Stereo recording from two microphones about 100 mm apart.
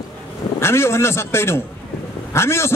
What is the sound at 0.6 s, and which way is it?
A man's voice, 25° left (ahead or behind).